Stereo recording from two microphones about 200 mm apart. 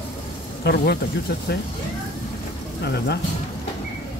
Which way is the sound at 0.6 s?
55° left (ahead or behind).